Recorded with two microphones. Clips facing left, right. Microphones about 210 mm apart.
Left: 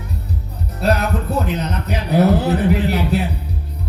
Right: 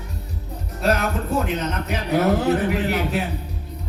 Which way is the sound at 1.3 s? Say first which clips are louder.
Even; 35° left (ahead or behind).